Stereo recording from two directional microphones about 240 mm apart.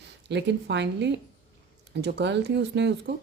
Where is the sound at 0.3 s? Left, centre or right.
Right.